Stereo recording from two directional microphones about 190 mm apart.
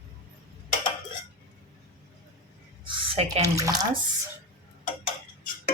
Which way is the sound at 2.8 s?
30° right (ahead or behind).